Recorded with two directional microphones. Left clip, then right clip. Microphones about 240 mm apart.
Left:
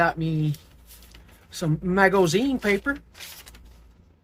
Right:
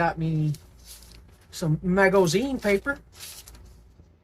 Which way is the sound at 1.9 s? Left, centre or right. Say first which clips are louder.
Left 1 dB; left.